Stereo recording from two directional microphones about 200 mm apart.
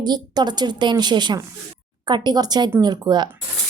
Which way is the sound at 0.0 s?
20° right (ahead or behind).